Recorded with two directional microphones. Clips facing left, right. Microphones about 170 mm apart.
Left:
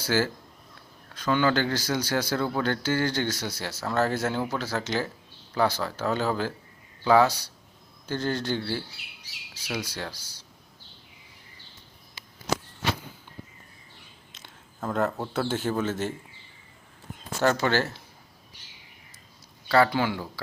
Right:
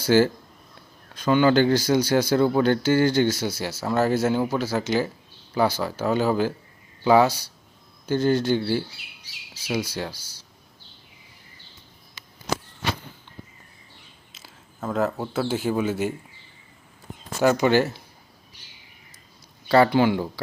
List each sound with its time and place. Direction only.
0.1 s a man's voice: 20° right (ahead or behind)
14.3 s speech: 5° right (ahead or behind)
17.4 s a man's voice: 10° right (ahead or behind)
19.6 s speech: 20° right (ahead or behind)